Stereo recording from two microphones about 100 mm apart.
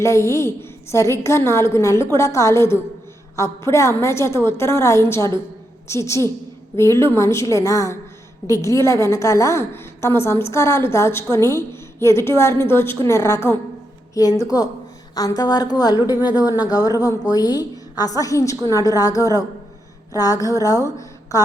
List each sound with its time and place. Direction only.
0.0 s a woman's voice: 30° left (ahead or behind)